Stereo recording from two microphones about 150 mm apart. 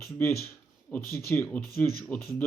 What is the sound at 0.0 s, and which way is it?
Speech, 15° left (ahead or behind).